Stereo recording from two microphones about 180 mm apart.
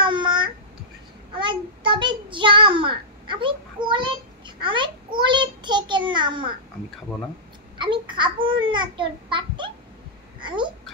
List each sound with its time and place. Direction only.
0.0 s babbling: 25° right (ahead or behind)
1.4 s child singing: 25° right (ahead or behind)
7.8 s babbling: 25° right (ahead or behind)
8.6 s a child's voice: 25° right (ahead or behind)